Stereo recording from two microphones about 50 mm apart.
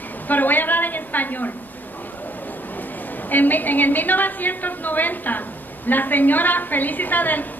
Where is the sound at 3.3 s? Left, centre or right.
Left.